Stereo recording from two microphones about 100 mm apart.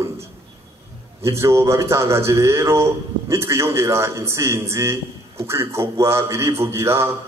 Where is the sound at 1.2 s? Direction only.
30° right (ahead or behind).